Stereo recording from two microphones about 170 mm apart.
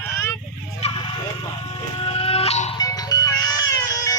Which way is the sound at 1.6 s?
30° left (ahead or behind).